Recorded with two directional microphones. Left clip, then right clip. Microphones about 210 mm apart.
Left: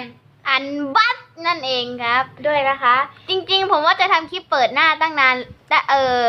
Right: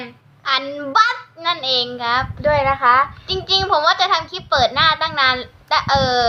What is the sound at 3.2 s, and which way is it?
A child's voice, 15° left (ahead or behind).